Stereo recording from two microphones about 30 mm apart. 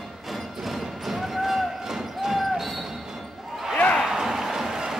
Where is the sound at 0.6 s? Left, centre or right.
Centre.